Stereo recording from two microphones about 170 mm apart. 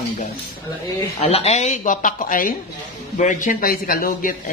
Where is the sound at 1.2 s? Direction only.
35° left (ahead or behind); by 4.3 s 60° left (ahead or behind).